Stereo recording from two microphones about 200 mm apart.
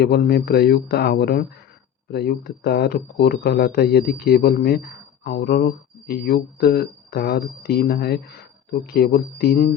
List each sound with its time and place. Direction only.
0.0 s speech: 55° left (ahead or behind)